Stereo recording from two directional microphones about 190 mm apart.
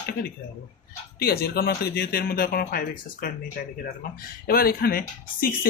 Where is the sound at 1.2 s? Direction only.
55° left (ahead or behind).